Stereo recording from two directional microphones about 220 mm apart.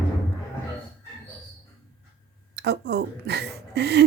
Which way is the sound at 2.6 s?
50° right (ahead or behind).